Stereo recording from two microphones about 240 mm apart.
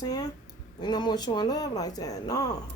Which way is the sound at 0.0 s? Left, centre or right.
Centre.